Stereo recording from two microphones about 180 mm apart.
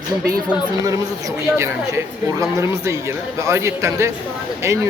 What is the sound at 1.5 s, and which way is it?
Speech, 15° right (ahead or behind).